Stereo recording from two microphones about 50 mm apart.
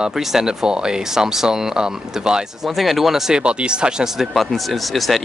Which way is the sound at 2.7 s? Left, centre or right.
Centre.